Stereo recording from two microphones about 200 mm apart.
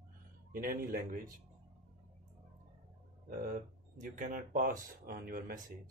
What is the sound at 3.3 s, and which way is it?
Speech, 40° right (ahead or behind).